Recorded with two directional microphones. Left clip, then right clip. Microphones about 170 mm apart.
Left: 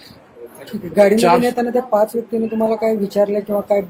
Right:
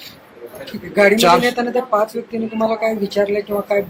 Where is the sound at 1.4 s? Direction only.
55° left (ahead or behind).